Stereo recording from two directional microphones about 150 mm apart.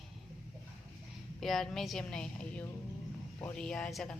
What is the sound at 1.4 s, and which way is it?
A woman's voice, centre (ahead or behind).